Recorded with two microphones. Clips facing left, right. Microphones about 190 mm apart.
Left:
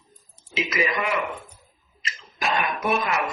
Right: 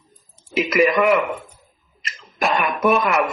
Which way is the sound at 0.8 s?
60° right (ahead or behind).